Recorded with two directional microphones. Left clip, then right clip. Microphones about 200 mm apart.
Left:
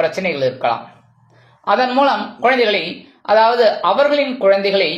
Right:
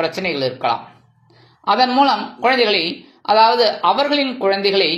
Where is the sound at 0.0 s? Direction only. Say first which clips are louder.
Left 3 dB; 30° right (ahead or behind).